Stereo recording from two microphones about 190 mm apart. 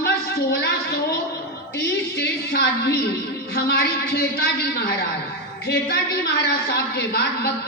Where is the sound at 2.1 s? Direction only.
60° left (ahead or behind).